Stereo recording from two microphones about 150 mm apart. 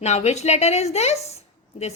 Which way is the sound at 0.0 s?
50° left (ahead or behind).